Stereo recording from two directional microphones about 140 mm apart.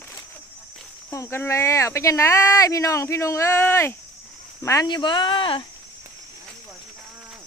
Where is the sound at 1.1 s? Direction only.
20° left (ahead or behind); by 5.6 s 35° left (ahead or behind).